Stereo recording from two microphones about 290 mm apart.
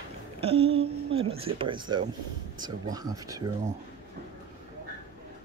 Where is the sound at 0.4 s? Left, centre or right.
Centre.